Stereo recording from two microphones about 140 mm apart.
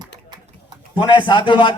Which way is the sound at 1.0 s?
35° left (ahead or behind).